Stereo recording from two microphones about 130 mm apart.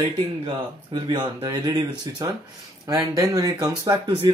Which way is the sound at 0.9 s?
35° right (ahead or behind).